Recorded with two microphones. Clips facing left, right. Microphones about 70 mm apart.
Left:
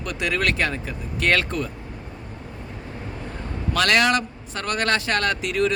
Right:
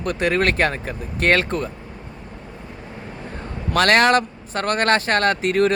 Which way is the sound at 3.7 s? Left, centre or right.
Right.